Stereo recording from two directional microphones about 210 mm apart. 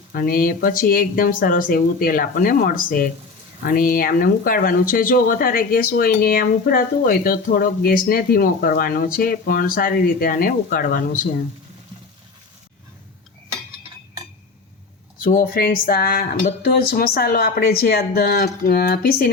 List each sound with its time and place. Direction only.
0.1 s speech: 45° left (ahead or behind)
15.2 s speech: 40° left (ahead or behind)